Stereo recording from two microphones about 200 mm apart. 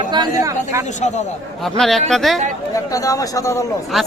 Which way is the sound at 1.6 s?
Centre (ahead or behind).